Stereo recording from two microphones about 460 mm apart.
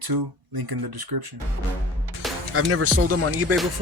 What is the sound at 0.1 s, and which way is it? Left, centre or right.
Speech, right.